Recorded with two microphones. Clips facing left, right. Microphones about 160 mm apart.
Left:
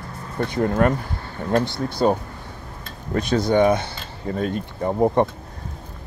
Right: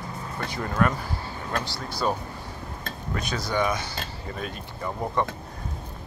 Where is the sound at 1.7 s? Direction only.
55° left (ahead or behind).